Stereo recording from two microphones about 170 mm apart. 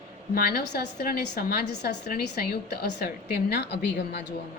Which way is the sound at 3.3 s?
80° left.